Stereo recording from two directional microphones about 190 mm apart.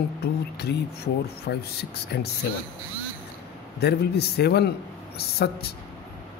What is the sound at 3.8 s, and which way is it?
Speech, 60° left (ahead or behind).